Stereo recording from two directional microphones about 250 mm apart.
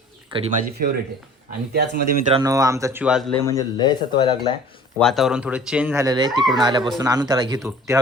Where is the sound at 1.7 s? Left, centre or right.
Right.